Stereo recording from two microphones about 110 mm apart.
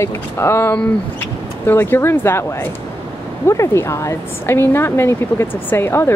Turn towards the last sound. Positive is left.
turn(degrees=20)  # may be behind; listen again after turning